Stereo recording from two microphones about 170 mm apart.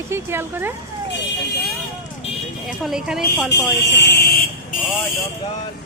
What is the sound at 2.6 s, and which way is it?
Speech, 5° right (ahead or behind).